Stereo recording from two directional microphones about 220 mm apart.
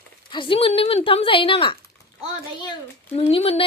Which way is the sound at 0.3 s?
25° left (ahead or behind).